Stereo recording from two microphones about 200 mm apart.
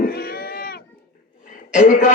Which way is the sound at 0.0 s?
50° left (ahead or behind).